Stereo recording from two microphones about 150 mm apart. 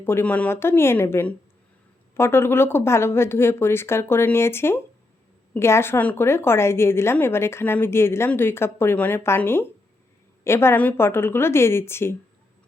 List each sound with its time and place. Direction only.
0.0 s a woman's voice: 15° left (ahead or behind)